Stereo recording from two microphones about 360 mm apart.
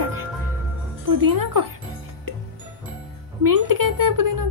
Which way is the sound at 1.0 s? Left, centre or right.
Right.